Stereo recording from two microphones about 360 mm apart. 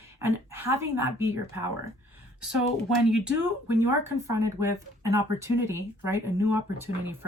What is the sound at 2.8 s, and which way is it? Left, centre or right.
Speech, centre.